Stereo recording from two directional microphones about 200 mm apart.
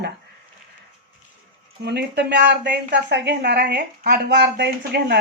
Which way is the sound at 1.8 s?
55° right (ahead or behind).